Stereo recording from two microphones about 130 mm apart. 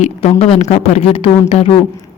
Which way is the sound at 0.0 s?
50° left (ahead or behind).